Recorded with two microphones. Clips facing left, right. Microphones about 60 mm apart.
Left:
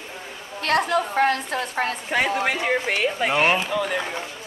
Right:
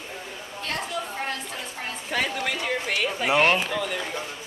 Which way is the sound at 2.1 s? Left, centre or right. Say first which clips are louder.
Left 4 dB; left.